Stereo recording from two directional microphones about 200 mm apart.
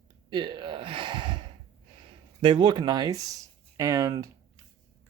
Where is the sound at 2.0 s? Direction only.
25° right (ahead or behind).